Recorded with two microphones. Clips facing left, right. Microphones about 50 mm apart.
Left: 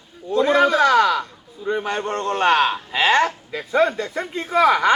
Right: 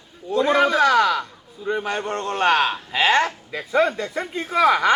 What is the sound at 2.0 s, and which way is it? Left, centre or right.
Speech, left.